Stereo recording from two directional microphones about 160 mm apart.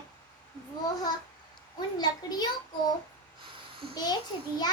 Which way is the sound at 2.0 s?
25° left (ahead or behind).